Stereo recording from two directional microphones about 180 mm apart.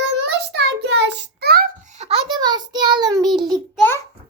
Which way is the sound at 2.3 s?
25° right (ahead or behind).